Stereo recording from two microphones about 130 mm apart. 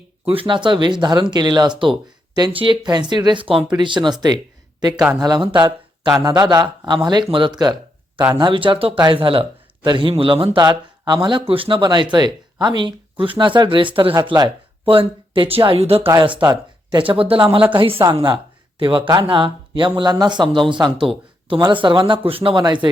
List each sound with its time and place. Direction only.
0.3 s a woman's voice: 40° right (ahead or behind)
20.8 s speech: centre (ahead or behind)
21.4 s speech: 40° right (ahead or behind)